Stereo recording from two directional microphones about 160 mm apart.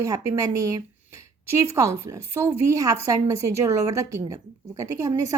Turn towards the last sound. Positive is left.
turn(degrees=-20)  # may be behind; listen again after turning